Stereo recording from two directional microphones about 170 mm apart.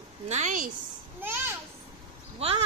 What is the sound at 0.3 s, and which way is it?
Speech, 45° right (ahead or behind).